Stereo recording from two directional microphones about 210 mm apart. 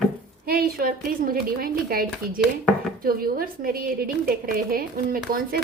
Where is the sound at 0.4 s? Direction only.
45° right (ahead or behind).